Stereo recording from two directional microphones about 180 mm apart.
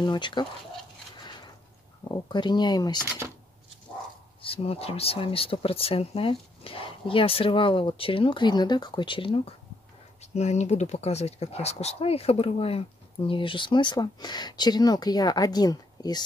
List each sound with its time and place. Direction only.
0.0 s speech: 25° left (ahead or behind)
2.0 s speech: 25° left (ahead or behind)
4.4 s speech: 30° left (ahead or behind)